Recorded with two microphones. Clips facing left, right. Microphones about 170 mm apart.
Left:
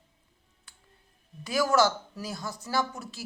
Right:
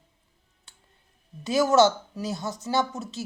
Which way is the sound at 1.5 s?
25° right (ahead or behind).